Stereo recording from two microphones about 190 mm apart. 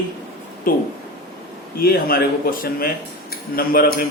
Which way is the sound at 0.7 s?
50° left (ahead or behind).